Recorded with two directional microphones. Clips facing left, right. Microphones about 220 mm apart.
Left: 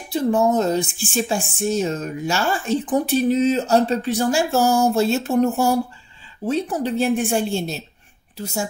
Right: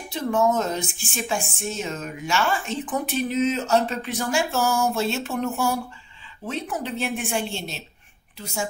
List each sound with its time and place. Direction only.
0.1 s speech: 35° left (ahead or behind)